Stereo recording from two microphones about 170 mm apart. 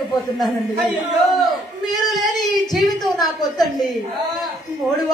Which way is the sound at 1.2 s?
Centre (ahead or behind).